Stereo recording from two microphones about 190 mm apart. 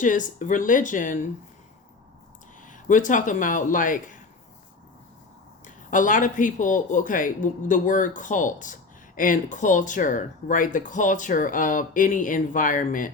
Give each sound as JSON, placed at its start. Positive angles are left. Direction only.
{"t": 0.0, "sound": "speech", "side_deg": 40}
{"t": 2.6, "sound": "speech", "side_deg": 40}
{"t": 5.6, "sound": "speech", "side_deg": 45}